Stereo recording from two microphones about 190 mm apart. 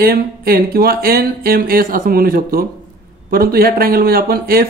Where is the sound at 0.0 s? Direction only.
50° right (ahead or behind).